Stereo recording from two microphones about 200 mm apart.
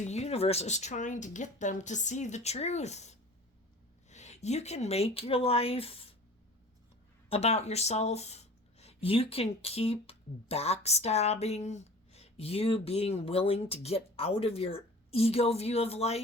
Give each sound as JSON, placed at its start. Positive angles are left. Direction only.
{"t": 0.0, "sound": "speech", "side_deg": 35}
{"t": 7.3, "sound": "speech", "side_deg": 30}